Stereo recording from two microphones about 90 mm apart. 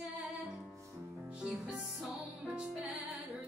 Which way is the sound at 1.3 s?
10° right (ahead or behind).